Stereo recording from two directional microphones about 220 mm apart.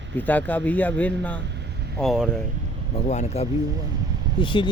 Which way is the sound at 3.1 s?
30° left (ahead or behind).